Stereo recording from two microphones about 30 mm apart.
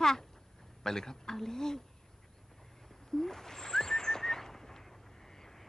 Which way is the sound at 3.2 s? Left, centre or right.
Centre.